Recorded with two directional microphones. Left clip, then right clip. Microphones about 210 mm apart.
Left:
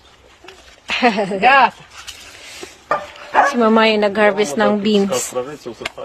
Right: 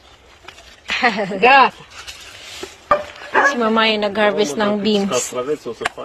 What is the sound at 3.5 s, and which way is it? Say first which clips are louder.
A woman's voice: left 3 dB; 25° left (ahead or behind).